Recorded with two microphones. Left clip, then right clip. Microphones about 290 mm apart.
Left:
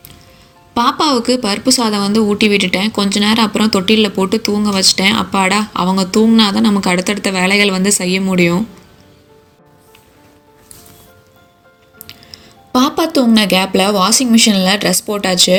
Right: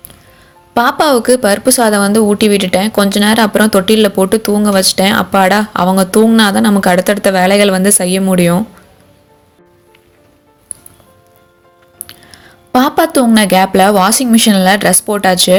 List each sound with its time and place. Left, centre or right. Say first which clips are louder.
0.7 s speech: right 4 dB; right
12.0 s speech: left 1 dB; right